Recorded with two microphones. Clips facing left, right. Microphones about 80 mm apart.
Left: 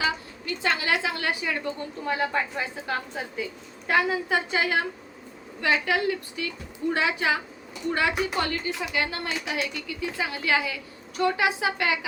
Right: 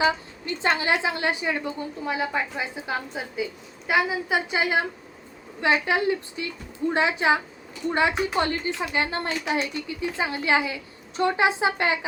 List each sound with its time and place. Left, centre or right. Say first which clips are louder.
0.0 s a woman's voice: right 5 dB; right
2.0 s a woman's voice: left 1 dB; centre; by 11.9 s right